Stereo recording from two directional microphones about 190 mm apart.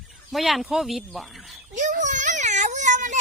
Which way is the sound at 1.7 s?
40° right (ahead or behind).